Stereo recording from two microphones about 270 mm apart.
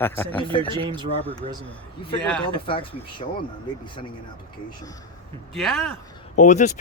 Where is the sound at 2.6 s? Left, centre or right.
Centre.